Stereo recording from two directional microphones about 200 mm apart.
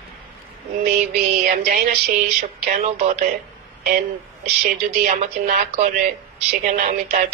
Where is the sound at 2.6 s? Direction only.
35° right (ahead or behind).